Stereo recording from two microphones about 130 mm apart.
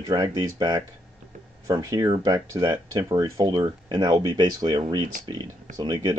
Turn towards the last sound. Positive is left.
turn(degrees=-30)  # may be behind; listen again after turning